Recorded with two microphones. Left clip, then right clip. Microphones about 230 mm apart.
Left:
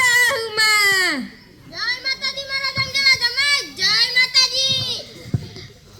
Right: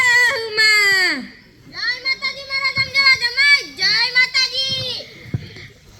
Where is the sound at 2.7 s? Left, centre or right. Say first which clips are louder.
Right 3 dB; left.